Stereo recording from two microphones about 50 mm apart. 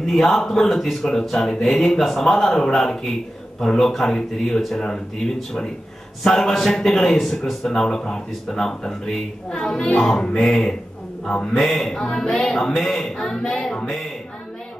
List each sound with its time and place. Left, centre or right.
0.0 s speech: centre